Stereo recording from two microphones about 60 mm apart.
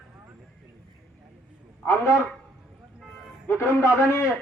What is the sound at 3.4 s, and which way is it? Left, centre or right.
Speech, left.